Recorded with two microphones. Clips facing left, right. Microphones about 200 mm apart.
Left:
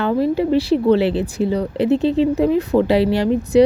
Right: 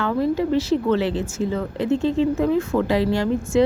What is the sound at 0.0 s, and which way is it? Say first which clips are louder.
A woman's voice: left 3 dB; 20° left (ahead or behind).